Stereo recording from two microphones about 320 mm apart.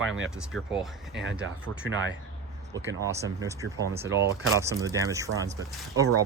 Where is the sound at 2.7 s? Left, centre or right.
Centre.